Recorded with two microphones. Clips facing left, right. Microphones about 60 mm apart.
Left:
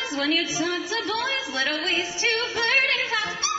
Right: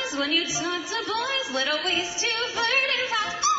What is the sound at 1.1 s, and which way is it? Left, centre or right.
Music, left.